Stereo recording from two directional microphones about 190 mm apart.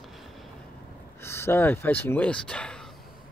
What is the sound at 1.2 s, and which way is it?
Speech, 15° left (ahead or behind).